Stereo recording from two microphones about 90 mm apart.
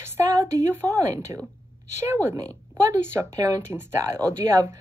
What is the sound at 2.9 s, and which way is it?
Speech, 30° right (ahead or behind).